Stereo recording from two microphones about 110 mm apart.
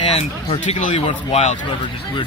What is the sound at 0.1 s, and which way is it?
Speech, 75° left (ahead or behind).